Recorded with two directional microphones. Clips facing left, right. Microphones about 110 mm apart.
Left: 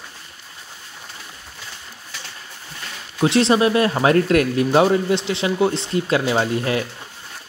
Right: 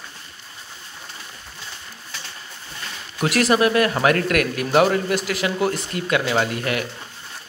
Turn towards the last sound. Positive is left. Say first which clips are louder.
# left 2 dB
turn(degrees=30)  # may be behind; listen again after turning